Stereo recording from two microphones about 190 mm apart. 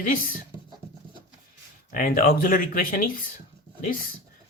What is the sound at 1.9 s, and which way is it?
Speech, 50° left (ahead or behind).